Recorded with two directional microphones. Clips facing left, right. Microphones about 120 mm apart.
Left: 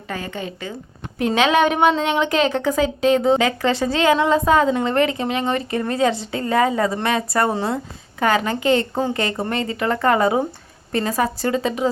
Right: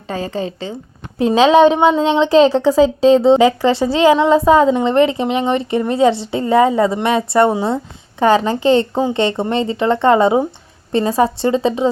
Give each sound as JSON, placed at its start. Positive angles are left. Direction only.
{"t": 0.1, "sound": "a woman's voice", "side_deg": -30}